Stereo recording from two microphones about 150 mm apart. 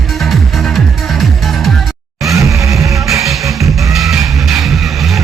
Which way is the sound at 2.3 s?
20° right (ahead or behind).